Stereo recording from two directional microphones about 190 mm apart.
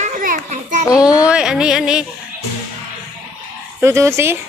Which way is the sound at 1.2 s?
5° right (ahead or behind).